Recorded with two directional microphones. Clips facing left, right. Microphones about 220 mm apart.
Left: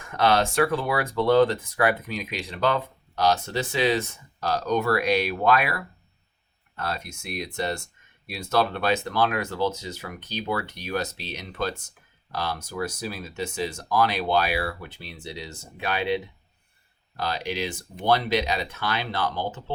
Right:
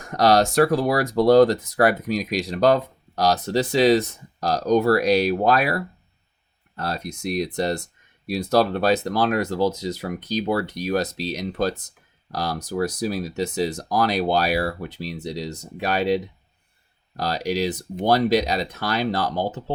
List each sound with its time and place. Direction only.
0.0 s speech: 40° right (ahead or behind)